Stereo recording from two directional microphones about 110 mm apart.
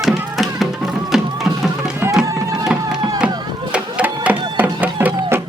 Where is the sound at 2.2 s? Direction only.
35° right (ahead or behind).